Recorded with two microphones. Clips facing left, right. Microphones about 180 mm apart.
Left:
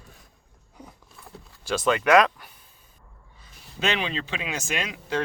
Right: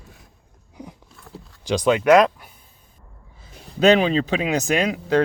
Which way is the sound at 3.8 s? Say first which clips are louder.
Right 12 dB; 40° right (ahead or behind).